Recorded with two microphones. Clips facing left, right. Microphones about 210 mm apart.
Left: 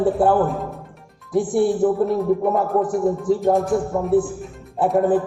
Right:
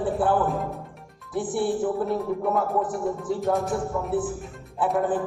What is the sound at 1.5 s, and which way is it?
Music, 45° left (ahead or behind).